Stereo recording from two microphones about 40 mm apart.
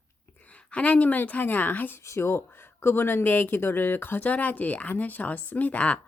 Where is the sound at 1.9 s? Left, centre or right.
Left.